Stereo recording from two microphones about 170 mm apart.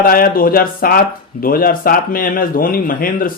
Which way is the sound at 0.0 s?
60° left (ahead or behind).